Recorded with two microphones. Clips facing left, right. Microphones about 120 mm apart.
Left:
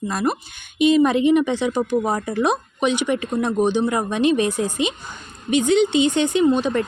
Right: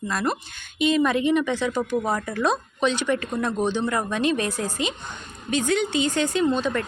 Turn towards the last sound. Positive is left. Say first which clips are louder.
# left 5 dB
turn(degrees=20)  # may be behind; listen again after turning